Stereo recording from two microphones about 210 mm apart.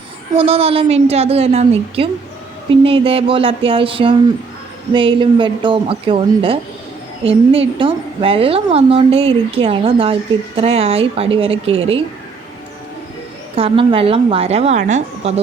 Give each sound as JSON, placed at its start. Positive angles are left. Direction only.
{"t": 0.3, "sound": "a woman's voice", "side_deg": -25}
{"t": 13.6, "sound": "a woman's voice", "side_deg": -25}